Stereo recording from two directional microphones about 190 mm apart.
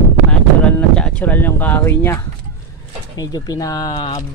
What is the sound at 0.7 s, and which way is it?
Speech, 5° left (ahead or behind).